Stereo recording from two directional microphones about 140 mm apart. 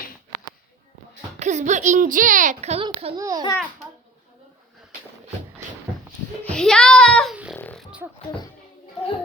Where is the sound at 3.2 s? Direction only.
25° right (ahead or behind).